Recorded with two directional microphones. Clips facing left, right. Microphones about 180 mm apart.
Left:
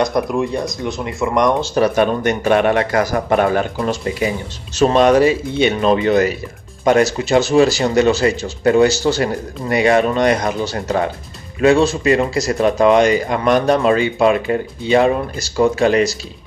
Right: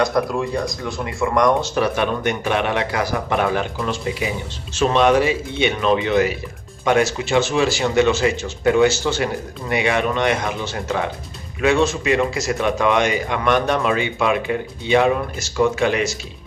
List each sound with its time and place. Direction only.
0.0 s speech: 20° left (ahead or behind)
1.8 s a man's voice: 40° left (ahead or behind)